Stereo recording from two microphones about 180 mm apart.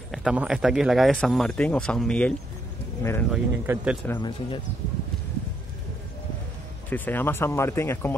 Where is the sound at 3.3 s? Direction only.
5° right (ahead or behind).